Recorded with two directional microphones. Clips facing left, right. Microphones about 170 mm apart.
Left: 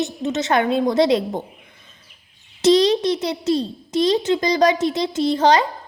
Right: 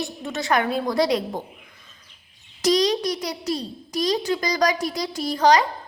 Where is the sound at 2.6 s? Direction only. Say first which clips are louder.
Left 5 dB; 25° left (ahead or behind).